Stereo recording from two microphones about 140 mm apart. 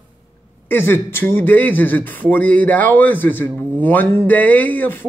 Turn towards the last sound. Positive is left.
turn(degrees=15)  # may be behind; listen again after turning